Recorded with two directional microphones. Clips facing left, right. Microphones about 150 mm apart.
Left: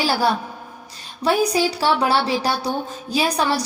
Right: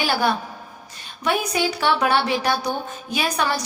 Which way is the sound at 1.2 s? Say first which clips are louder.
Left 4 dB; 35° left (ahead or behind).